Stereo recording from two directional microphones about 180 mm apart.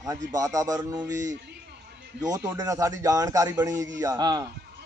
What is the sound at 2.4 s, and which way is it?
Speech, 15° right (ahead or behind).